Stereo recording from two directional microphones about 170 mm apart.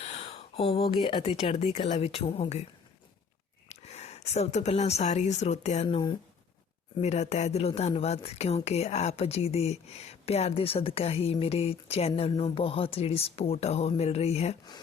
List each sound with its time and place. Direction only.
0.0 s speech: 40° left (ahead or behind)
3.7 s speech: 40° left (ahead or behind)
7.0 s speech: 40° left (ahead or behind)